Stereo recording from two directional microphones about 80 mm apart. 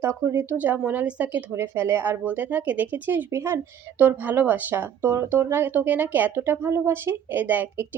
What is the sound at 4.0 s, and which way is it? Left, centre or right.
Speech, right.